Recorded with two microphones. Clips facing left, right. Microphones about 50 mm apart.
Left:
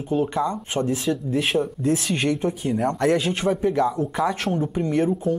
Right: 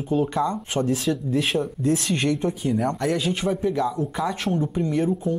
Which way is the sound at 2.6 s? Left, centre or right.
Left.